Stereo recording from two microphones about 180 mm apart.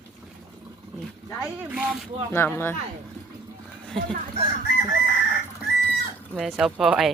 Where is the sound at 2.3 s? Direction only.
15° left (ahead or behind).